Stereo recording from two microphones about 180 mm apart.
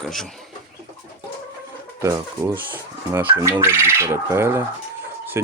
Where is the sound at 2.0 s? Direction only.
15° right (ahead or behind).